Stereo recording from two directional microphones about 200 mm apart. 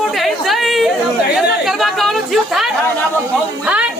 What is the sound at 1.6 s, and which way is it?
Speech, centre (ahead or behind).